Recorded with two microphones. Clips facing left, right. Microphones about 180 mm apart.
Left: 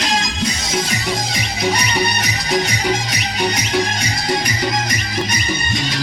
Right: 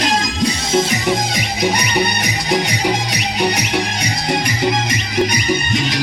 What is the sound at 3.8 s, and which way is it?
Music, 15° right (ahead or behind).